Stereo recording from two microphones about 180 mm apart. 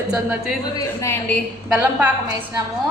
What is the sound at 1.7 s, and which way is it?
Speech, 10° right (ahead or behind).